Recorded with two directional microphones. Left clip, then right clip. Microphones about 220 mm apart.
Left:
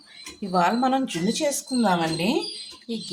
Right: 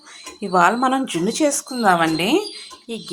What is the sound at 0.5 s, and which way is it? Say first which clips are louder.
A woman's voice: right 5 dB; 20° right (ahead or behind).